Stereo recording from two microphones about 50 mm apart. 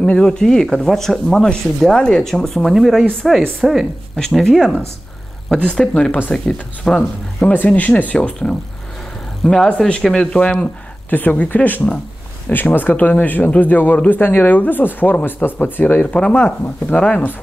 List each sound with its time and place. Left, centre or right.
0.0 s speech: centre
4.2 s speech: centre
5.7 s speech: centre
7.5 s speech: left
9.4 s speech: centre
11.1 s speech: left
15.8 s speech: left